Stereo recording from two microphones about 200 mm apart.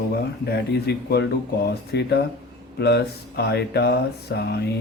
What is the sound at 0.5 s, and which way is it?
Speech, 55° left (ahead or behind).